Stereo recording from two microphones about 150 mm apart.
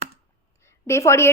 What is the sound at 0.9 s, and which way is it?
Speech, 20° left (ahead or behind).